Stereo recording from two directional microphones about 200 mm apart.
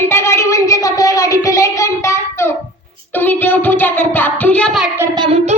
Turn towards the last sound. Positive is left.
turn(degrees=-30)  # may be behind; listen again after turning